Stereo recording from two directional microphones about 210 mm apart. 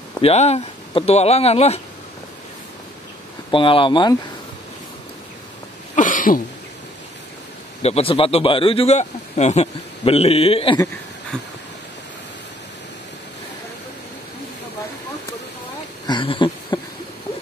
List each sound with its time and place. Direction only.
0.2 s speech: 30° left (ahead or behind)
3.5 s speech: 25° left (ahead or behind)
5.9 s throat clearing: 40° left (ahead or behind)
7.8 s speech: 30° left (ahead or behind)
16.1 s a sound: 25° left (ahead or behind)